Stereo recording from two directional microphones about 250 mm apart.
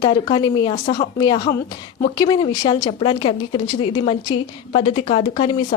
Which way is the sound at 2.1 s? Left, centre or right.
Centre.